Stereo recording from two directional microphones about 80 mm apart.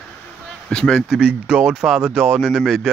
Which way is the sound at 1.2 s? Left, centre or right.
Centre.